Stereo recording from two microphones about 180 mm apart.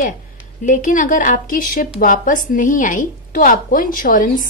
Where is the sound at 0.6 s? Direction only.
45° left (ahead or behind).